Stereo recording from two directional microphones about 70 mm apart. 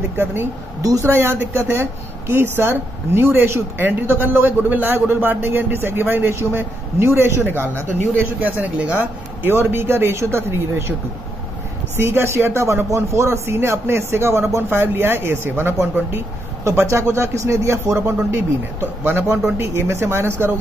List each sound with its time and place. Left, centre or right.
0.2 s speech: right
8.9 s speech: right
12.0 s speech: right
18.0 s speech: right